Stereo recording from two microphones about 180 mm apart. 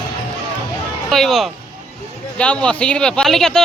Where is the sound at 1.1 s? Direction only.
Centre (ahead or behind).